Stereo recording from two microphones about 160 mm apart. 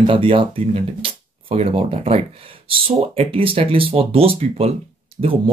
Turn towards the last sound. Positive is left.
turn(degrees=-35)  # may be behind; listen again after turning